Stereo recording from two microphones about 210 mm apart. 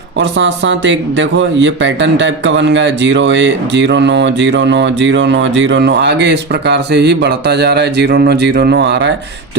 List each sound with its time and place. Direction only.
0.2 s speech: 60° right (ahead or behind)